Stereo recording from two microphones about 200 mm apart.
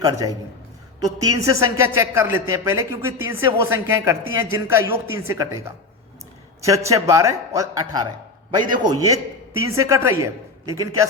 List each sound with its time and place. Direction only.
0.0 s a man's voice: 20° right (ahead or behind)